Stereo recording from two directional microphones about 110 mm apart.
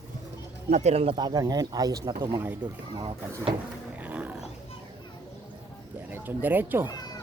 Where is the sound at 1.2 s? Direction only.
40° right (ahead or behind).